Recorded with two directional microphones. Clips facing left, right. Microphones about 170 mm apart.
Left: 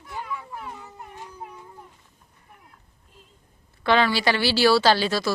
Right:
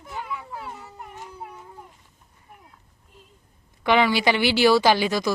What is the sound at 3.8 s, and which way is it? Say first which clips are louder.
A woman's voice: right 1 dB; 15° right (ahead or behind).